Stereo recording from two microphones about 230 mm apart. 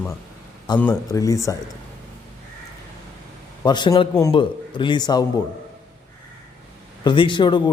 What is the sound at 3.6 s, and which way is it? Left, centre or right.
Speech, centre.